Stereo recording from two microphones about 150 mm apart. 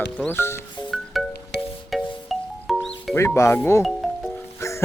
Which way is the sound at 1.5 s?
90° left.